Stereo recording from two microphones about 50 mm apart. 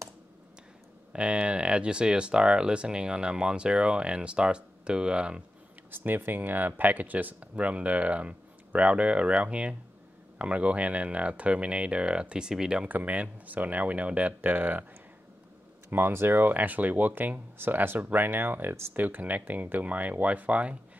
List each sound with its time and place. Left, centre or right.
1.1 s speech: right
5.9 s speech: right; by 12.8 s centre
12.8 s speech: right
15.9 s speech: right
16.5 s speech: right